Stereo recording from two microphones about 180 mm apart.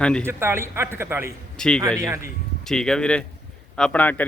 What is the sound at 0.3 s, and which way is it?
A man's voice, 15° right (ahead or behind).